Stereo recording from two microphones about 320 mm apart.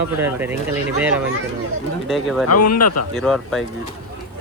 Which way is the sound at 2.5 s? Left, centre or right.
Left.